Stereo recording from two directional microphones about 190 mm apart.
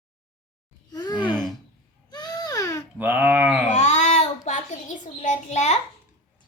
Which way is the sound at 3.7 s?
35° left (ahead or behind).